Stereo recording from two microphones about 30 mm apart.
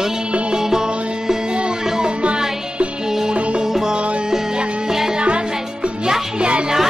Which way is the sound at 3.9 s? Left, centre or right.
Right.